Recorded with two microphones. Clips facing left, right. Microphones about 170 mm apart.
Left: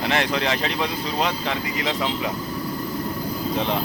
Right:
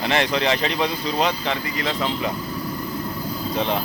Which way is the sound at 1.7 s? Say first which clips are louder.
Even; 15° left (ahead or behind).